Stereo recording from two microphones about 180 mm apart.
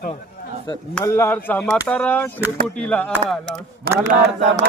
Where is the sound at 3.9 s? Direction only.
55° right (ahead or behind).